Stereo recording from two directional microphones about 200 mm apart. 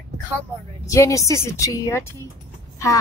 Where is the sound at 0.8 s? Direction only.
15° left (ahead or behind).